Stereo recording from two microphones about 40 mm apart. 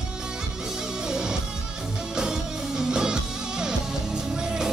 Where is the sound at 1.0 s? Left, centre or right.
Centre.